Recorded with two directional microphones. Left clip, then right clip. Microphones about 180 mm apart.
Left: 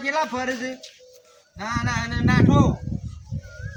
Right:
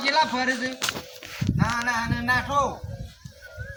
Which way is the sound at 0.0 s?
10° left (ahead or behind).